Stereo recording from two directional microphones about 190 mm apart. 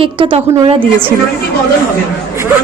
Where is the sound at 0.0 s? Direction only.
25° right (ahead or behind).